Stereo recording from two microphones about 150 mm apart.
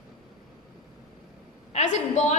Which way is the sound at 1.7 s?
50° left (ahead or behind).